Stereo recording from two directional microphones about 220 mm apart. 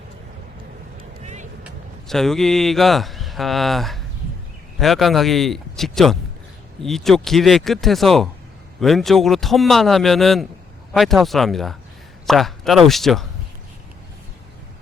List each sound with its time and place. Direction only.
1.2 s vehicle: 30° right (ahead or behind)
1.6 s a man's voice: centre (ahead or behind)